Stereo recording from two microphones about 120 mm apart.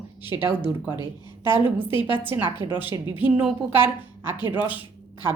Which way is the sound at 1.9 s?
45° left (ahead or behind).